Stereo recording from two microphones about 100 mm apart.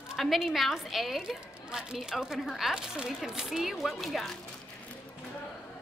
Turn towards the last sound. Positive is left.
turn(degrees=0)  # may be behind; listen again after turning